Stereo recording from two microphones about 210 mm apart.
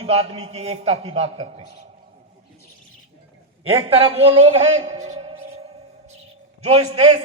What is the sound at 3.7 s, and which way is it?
A man's voice, 25° right (ahead or behind).